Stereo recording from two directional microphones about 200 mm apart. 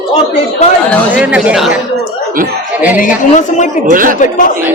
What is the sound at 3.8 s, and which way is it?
Speech, 45° right (ahead or behind).